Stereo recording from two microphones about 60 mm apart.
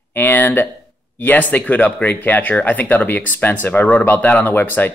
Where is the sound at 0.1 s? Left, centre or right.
Left.